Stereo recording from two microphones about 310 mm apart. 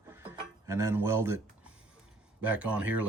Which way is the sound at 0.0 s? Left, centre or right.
Centre.